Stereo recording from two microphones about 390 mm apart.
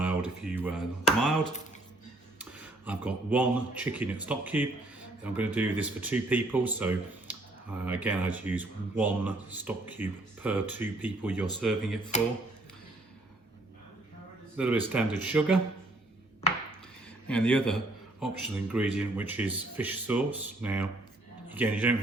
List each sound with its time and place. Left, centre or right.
0.0 s a sound: centre
2.4 s speech: centre
14.5 s a man's voice: centre
16.4 s chopping: centre
17.2 s a man's voice: centre